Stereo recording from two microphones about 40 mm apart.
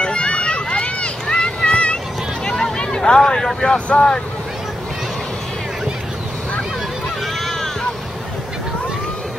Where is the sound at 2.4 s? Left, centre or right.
Centre.